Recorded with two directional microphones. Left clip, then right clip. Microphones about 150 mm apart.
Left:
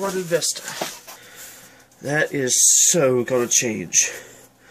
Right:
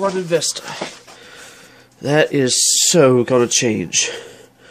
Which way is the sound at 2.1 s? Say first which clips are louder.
Right 6 dB; 40° right (ahead or behind).